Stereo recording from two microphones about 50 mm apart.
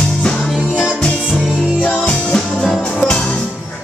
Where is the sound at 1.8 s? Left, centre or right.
Left.